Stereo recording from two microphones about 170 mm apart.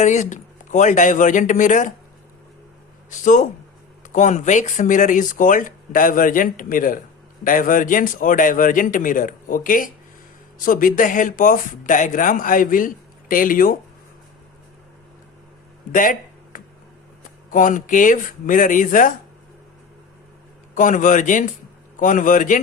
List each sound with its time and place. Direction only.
0.0 s speech: 45° left (ahead or behind)
3.1 s speech: 45° left (ahead or behind)
15.9 s a sound: 50° left (ahead or behind)
17.5 s speech: 50° left (ahead or behind)
20.7 s speech: 45° left (ahead or behind)